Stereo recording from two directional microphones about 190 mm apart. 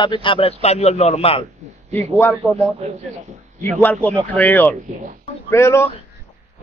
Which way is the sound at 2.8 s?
35° right (ahead or behind).